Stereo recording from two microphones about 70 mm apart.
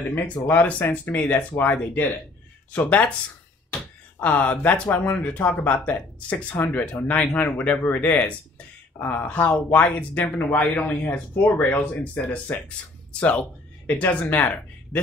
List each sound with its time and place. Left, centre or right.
0.1 s speech: left
4.2 s speech: left